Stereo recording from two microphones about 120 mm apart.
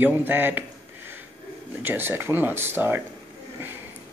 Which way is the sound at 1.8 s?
20° right (ahead or behind).